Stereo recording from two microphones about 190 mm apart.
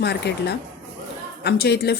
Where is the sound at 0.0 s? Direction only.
60° left (ahead or behind).